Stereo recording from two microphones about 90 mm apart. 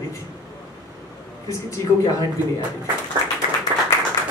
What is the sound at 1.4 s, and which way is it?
Speech, 35° left (ahead or behind).